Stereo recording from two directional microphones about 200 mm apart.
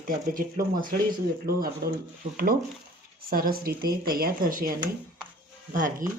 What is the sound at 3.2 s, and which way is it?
Speech, 45° right (ahead or behind).